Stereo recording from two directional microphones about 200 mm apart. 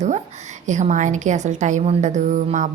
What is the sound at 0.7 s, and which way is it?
A woman's voice, 35° right (ahead or behind).